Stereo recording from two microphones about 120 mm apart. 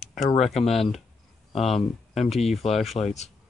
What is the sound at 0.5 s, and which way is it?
Speech, 60° left (ahead or behind).